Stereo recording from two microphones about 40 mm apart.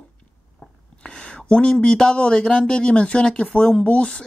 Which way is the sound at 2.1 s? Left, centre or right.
Left.